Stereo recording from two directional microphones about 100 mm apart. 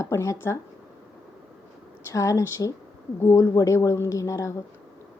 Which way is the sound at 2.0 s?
30° left (ahead or behind).